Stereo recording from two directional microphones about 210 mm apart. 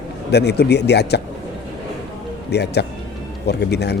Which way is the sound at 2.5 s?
50° left (ahead or behind).